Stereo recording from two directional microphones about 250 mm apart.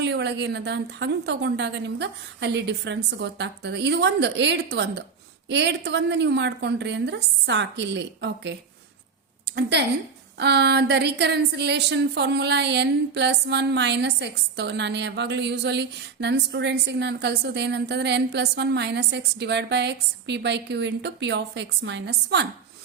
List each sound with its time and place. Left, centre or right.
0.0 s speech: right
9.6 s speech: right